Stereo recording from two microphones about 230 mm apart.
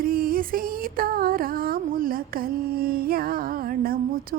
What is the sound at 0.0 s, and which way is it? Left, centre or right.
Music, right.